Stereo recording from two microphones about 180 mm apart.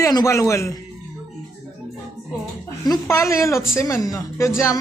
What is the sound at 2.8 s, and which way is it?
Speech, 20° left (ahead or behind).